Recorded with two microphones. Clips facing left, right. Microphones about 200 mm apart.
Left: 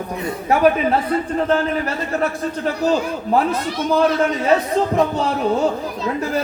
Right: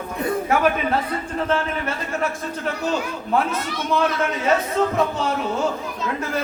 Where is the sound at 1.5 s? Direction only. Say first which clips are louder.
Left 4 dB; 35° left (ahead or behind).